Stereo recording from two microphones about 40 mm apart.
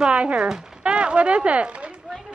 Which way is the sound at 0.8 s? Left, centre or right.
Right.